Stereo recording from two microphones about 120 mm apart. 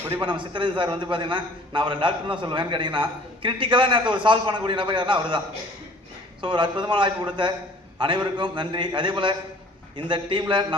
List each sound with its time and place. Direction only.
0.2 s a man's voice: 45° right (ahead or behind)
6.4 s a man's voice: 40° right (ahead or behind)